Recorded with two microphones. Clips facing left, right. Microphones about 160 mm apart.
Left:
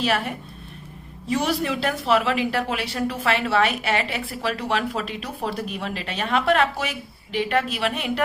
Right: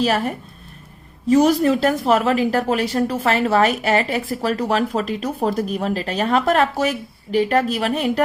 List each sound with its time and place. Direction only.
0.0 s a woman's voice: 40° right (ahead or behind)